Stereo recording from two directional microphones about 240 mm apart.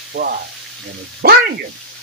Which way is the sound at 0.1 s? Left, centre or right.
Right.